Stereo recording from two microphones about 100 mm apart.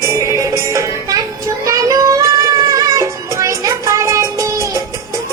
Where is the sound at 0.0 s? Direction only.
30° right (ahead or behind).